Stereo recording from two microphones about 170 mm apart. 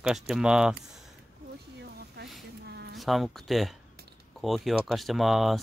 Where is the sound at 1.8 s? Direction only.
75° right (ahead or behind).